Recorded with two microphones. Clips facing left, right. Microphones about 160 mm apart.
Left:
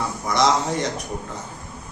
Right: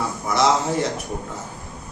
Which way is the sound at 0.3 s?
5° right (ahead or behind).